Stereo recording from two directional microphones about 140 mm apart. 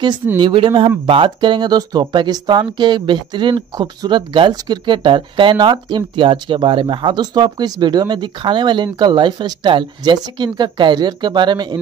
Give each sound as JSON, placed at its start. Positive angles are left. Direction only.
{"t": 0.4, "sound": "speech", "side_deg": -35}